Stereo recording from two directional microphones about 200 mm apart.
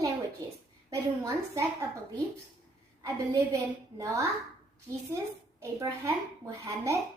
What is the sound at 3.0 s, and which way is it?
A woman's voice, 15° right (ahead or behind).